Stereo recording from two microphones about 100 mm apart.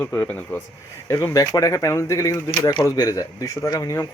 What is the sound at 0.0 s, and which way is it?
Speech, 20° left (ahead or behind).